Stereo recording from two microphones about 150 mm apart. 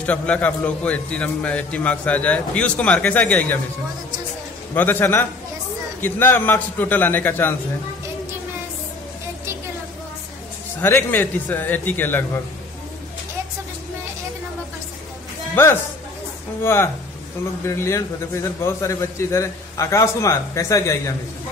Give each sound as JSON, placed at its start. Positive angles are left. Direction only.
{"t": 0.0, "sound": "a man's voice", "side_deg": 10}
{"t": 4.7, "sound": "a man's voice", "side_deg": 15}
{"t": 10.8, "sound": "a man's voice", "side_deg": 15}
{"t": 15.5, "sound": "a man's voice", "side_deg": 15}